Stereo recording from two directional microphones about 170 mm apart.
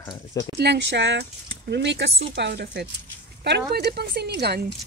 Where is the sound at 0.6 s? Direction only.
80° right.